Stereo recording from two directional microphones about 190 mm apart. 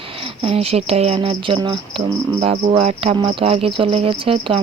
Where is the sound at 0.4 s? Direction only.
30° right (ahead or behind).